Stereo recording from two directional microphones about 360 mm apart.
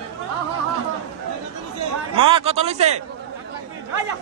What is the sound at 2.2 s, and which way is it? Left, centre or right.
Speech, centre.